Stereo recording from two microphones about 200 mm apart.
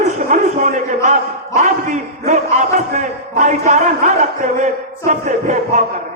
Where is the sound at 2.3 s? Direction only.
35° right (ahead or behind).